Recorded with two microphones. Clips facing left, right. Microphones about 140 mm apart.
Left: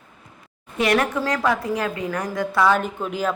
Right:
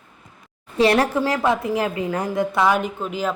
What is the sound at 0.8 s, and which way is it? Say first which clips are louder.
A woman's voice: right 3 dB; 30° right (ahead or behind).